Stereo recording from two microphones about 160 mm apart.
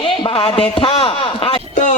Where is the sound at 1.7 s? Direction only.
50° left (ahead or behind).